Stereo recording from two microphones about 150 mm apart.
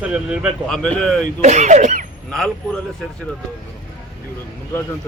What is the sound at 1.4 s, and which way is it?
Speech, 50° right (ahead or behind).